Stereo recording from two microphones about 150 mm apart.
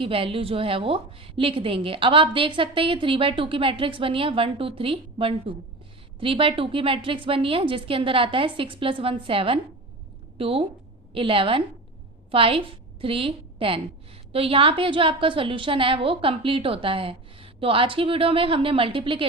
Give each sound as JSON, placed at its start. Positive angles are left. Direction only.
{"t": 0.0, "sound": "a woman's voice", "side_deg": -40}